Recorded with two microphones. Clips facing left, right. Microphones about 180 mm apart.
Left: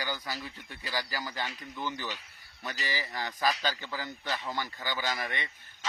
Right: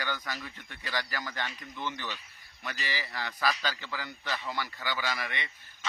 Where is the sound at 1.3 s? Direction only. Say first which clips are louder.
Left 1 dB; 10° left (ahead or behind).